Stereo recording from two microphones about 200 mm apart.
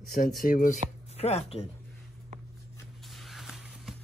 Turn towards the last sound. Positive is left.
turn(degrees=-5)  # may be behind; listen again after turning